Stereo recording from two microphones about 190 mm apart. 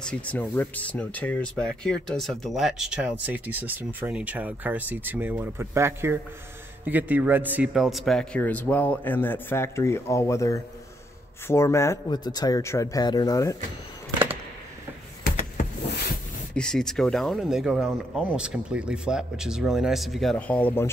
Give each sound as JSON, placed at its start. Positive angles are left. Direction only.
{"t": 0.0, "sound": "a man's voice", "side_deg": 5}
{"t": 16.5, "sound": "speech", "side_deg": 5}